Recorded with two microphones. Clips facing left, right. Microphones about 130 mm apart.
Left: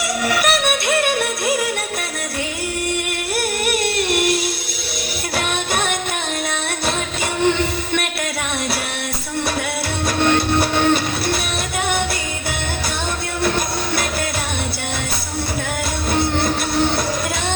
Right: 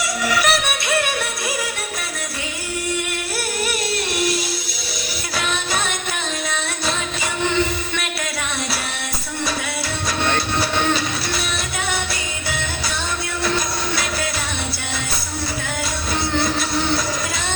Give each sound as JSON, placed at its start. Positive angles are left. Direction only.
{"t": 0.3, "sound": "music", "side_deg": 55}
{"t": 5.4, "sound": "music", "side_deg": 55}
{"t": 10.6, "sound": "music", "side_deg": 55}